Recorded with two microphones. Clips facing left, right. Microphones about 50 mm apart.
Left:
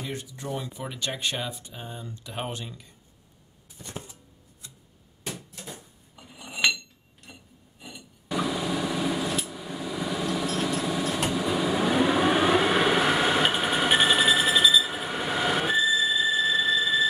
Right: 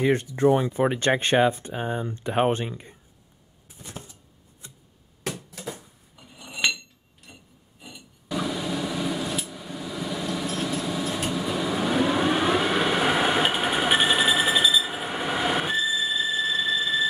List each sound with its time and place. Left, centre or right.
0.0 s speech: right
4.6 s clock: right
6.1 s cutlery: centre
7.3 s filing: centre
8.4 s a sound: centre
11.2 s vehicle: centre
13.0 s jackhammer: centre
15.1 s train: centre